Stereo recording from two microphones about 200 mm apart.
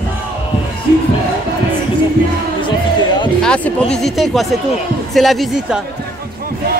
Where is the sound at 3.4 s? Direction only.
5° left (ahead or behind).